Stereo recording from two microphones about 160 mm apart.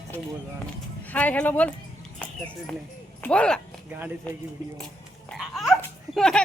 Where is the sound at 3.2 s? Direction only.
5° left (ahead or behind).